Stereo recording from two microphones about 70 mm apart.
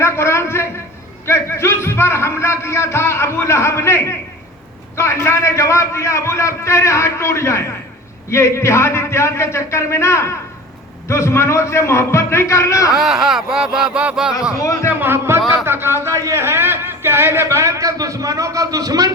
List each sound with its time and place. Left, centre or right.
0.0 s a sound: left
1.3 s a man's voice: left
12.9 s speech: centre
14.6 s a man's voice: left
14.8 s speech: right
17.6 s a man's voice: right